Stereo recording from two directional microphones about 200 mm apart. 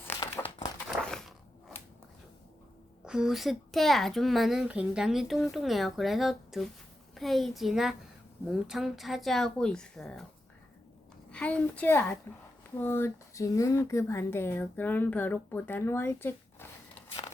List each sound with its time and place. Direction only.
0.2 s crumpling: 25° left (ahead or behind)
3.0 s a woman's voice: 5° right (ahead or behind)
11.3 s speech: 5° left (ahead or behind)